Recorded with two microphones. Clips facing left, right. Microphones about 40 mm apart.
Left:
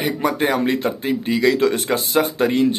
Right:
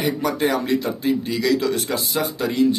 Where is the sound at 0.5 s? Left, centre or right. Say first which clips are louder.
Left 2 dB; left.